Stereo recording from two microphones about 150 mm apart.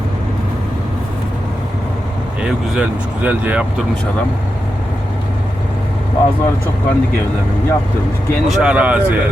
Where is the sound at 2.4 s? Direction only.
10° right (ahead or behind).